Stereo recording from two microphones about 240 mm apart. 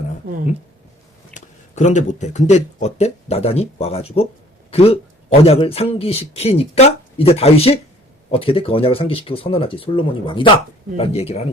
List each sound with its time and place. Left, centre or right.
1.3 s speech: left